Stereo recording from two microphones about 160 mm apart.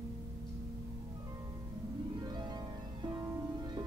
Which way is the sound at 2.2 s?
25° right (ahead or behind).